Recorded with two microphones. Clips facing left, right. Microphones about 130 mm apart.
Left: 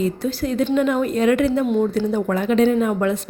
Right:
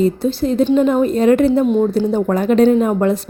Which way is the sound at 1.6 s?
25° right (ahead or behind).